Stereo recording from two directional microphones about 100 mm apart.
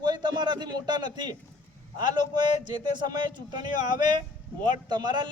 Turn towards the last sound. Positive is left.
turn(degrees=-45)  # may be behind; listen again after turning